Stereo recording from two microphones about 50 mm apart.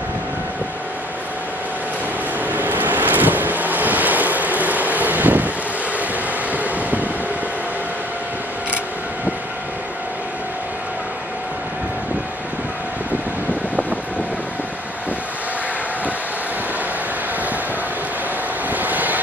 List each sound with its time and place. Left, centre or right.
2.4 s vehicle: right
6.5 s vehicle: right
18.7 s vehicle: right